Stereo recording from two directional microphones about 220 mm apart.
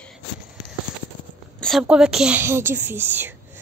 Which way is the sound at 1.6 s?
Centre (ahead or behind).